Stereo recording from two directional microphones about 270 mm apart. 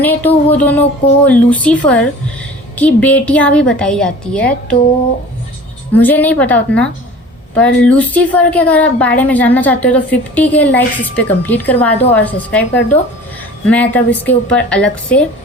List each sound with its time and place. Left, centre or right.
0.0 s a woman's voice: centre
5.9 s a woman's voice: centre
13.7 s a woman's voice: centre